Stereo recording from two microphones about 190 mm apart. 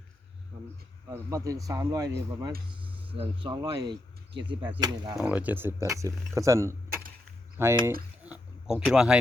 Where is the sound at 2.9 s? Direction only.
10° right (ahead or behind).